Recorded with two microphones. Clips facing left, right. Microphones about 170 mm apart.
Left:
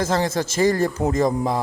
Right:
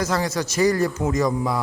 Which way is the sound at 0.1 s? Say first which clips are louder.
Left 2 dB; 25° left (ahead or behind).